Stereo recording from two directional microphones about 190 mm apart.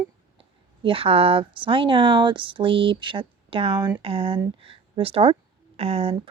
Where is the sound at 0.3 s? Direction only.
30° right (ahead or behind).